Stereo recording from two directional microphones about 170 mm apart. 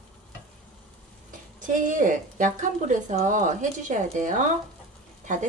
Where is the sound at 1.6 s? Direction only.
50° right (ahead or behind).